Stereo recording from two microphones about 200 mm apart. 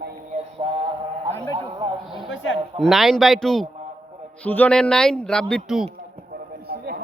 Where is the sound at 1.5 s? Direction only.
25° right (ahead or behind).